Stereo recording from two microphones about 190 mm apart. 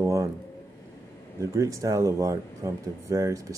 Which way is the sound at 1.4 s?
15° right (ahead or behind).